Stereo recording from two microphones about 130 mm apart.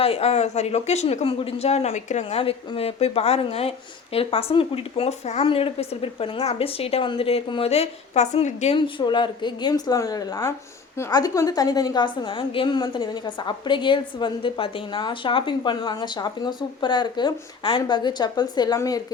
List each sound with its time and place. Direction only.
0.0 s speech: 50° left (ahead or behind)
2.4 s speech: 45° left (ahead or behind)
8.7 s a woman's voice: 35° left (ahead or behind)